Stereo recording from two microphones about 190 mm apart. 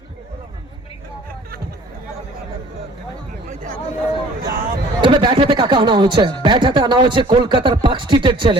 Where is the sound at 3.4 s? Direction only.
45° right (ahead or behind).